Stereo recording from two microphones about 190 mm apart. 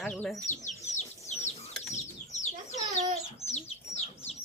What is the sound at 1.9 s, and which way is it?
Chicken, 40° left (ahead or behind).